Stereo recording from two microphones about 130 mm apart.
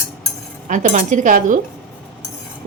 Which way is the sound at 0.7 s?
70° right (ahead or behind).